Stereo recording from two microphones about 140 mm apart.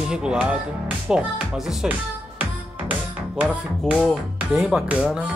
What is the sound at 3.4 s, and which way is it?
Music, 10° right (ahead or behind).